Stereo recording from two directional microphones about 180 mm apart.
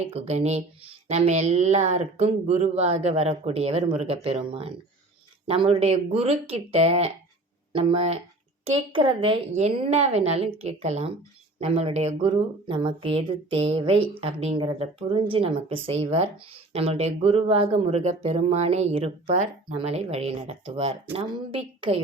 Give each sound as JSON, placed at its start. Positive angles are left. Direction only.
{"t": 0.1, "sound": "a woman's voice", "side_deg": -35}